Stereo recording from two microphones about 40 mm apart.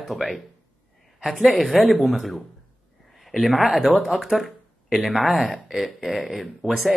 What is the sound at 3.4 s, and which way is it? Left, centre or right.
Speech, centre.